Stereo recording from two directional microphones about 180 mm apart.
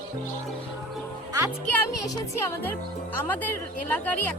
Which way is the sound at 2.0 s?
20° left (ahead or behind).